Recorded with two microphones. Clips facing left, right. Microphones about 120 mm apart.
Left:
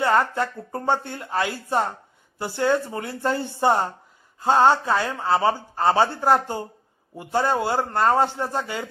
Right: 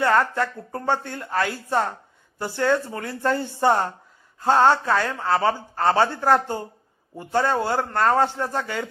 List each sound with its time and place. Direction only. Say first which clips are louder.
0.0 s a man's voice: even; 20° left (ahead or behind)